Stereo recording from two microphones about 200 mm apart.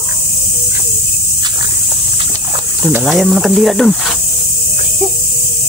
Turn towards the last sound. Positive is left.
turn(degrees=0)  # may be behind; listen again after turning